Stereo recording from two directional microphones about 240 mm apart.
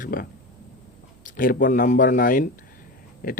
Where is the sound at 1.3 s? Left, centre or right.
Left.